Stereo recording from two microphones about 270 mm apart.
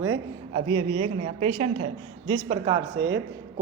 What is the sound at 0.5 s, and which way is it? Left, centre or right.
A woman's voice, right.